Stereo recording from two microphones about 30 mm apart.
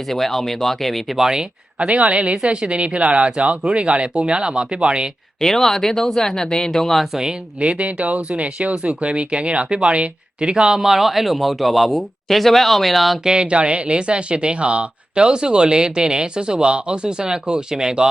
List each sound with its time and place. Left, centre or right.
0.1 s speech: centre
1.8 s speech: right
2.1 s speech: right
5.4 s speech: centre
7.6 s speech: right
10.5 s speech: right
10.8 s speech: centre
13.2 s speech: right